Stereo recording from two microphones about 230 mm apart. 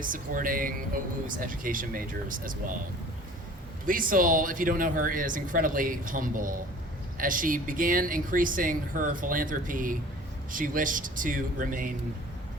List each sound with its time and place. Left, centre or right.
0.0 s speech: right
3.8 s speech: right